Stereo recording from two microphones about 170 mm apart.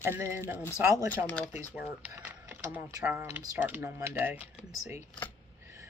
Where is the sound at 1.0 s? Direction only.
5° left (ahead or behind).